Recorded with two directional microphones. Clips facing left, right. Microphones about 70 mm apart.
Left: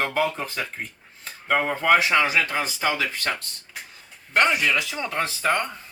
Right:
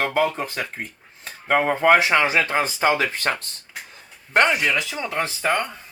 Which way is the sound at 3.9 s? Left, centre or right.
Right.